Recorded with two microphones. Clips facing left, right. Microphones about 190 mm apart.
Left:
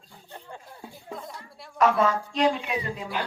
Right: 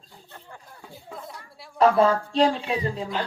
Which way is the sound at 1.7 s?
30° right (ahead or behind).